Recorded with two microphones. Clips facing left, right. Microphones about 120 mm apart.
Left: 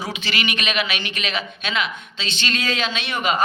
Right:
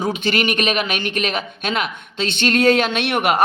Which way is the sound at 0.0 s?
50° right (ahead or behind).